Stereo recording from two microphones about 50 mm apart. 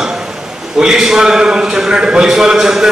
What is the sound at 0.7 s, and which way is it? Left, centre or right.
A man's voice, centre.